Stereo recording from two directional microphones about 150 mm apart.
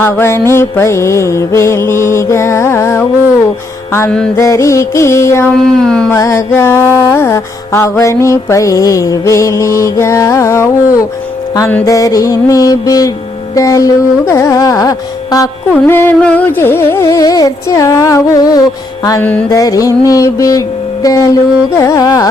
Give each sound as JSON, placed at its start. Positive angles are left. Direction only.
{"t": 0.0, "sound": "mantra", "side_deg": 15}
{"t": 4.4, "sound": "mantra", "side_deg": 20}
{"t": 5.5, "sound": "howl", "side_deg": 5}
{"t": 6.1, "sound": "mantra", "side_deg": 20}
{"t": 15.7, "sound": "mantra", "side_deg": 10}
{"t": 19.2, "sound": "mantra", "side_deg": 10}
{"t": 19.5, "sound": "mantra", "side_deg": 25}